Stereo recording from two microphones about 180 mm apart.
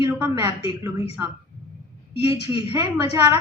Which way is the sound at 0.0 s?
20° right (ahead or behind).